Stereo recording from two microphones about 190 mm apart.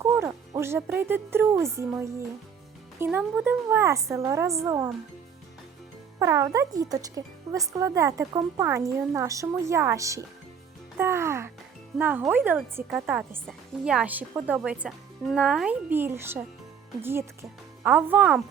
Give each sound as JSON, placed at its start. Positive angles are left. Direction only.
{"t": 0.0, "sound": "speech", "side_deg": -15}
{"t": 6.1, "sound": "speech", "side_deg": -15}
{"t": 10.9, "sound": "music", "side_deg": -15}
{"t": 11.9, "sound": "speech", "side_deg": -10}